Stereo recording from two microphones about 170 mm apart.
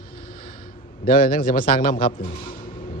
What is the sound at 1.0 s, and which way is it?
Speech, 55° left (ahead or behind).